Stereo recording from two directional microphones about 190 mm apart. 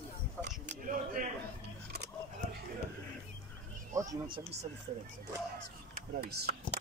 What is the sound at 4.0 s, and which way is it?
Speech, 20° right (ahead or behind).